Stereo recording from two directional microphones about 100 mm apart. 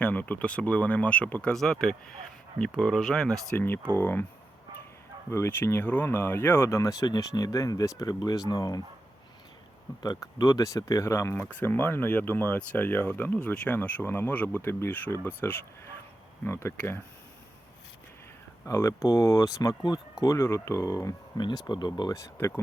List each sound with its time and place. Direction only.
0.0 s speech: 15° left (ahead or behind)
3.5 s speech: 20° left (ahead or behind)
5.3 s speech: 25° left (ahead or behind); by 8.8 s 40° left (ahead or behind)
10.0 s speech: 40° left (ahead or behind)
11.3 s speech: 15° left (ahead or behind)
18.6 s speech: 30° left (ahead or behind)
21.7 s speech: 45° left (ahead or behind)
22.1 s speech: 30° left (ahead or behind)